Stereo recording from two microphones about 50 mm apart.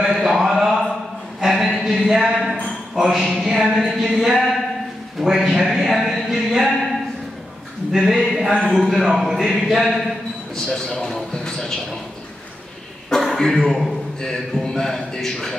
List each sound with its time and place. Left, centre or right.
0.0 s a sound: centre
5.2 s a man's voice: centre
6.0 s a sound: centre
7.9 s speech: centre
10.5 s a man's voice: centre
13.1 s a man's voice: centre